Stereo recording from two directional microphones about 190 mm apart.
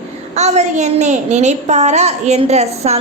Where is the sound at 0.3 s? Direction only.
35° right (ahead or behind).